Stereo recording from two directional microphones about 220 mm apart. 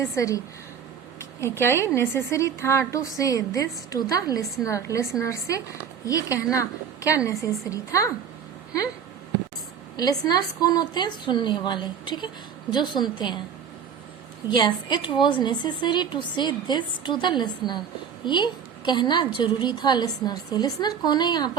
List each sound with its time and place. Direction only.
0.0 s a woman's voice: 15° left (ahead or behind)
10.0 s a woman's voice: 15° left (ahead or behind)
14.5 s a woman's voice: 20° left (ahead or behind)